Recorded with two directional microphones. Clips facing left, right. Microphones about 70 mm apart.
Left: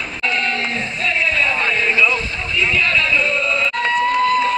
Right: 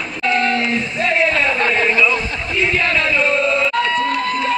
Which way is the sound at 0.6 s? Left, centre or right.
Right.